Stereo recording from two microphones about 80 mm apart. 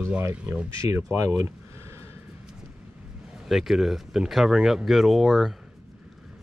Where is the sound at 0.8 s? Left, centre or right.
Right.